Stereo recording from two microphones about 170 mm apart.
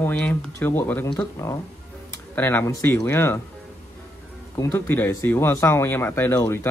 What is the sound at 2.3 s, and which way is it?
Speech, 10° left (ahead or behind).